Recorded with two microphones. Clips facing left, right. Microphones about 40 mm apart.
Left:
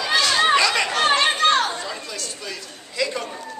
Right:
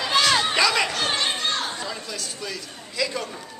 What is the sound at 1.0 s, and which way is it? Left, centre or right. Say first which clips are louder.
Chatter: left 7 dB; left.